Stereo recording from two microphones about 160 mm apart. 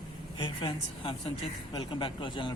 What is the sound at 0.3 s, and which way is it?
Speech, 30° left (ahead or behind).